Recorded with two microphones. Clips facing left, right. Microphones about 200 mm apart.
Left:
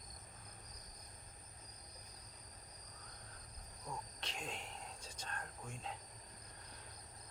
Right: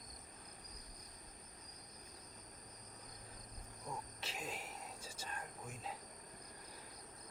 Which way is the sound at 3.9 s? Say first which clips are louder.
Even; 5° right (ahead or behind).